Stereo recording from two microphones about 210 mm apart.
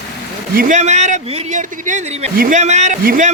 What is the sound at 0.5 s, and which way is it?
A man's voice, 40° right (ahead or behind).